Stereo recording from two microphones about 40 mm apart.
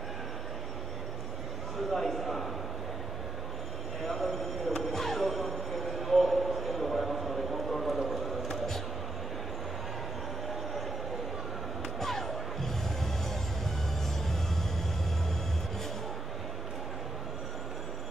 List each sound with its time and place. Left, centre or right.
1.9 s a man's voice: centre
4.0 s a sound: centre
12.0 s slam: centre